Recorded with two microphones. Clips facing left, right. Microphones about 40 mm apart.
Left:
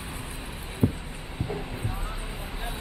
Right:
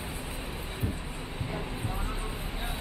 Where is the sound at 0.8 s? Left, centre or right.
Left.